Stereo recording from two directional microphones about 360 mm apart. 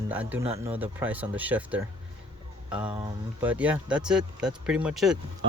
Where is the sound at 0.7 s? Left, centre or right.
Centre.